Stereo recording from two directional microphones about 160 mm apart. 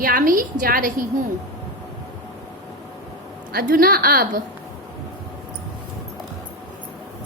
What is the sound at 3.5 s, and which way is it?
Speech, 70° right (ahead or behind).